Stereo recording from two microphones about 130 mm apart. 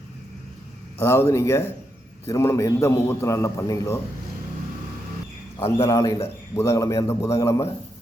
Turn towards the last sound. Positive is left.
turn(degrees=25)  # may be behind; listen again after turning